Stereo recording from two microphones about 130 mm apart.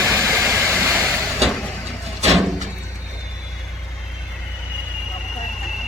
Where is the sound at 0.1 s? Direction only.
20° right (ahead or behind).